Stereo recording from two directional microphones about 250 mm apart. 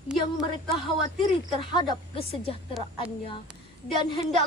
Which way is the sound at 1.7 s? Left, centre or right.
Centre.